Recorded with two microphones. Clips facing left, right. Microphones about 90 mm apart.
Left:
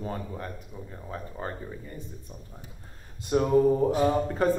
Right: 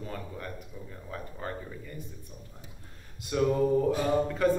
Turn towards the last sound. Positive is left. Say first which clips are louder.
# left 2 dB
turn(degrees=30)  # may be behind; listen again after turning